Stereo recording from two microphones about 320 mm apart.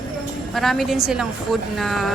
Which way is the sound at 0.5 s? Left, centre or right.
Centre.